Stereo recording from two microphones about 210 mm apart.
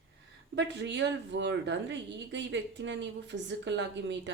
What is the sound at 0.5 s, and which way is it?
A woman's voice, 55° right (ahead or behind).